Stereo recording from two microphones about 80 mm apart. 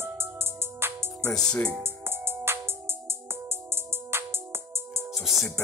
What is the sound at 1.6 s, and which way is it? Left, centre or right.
Music, right.